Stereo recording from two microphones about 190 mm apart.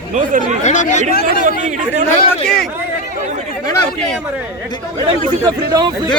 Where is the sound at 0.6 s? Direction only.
40° left (ahead or behind).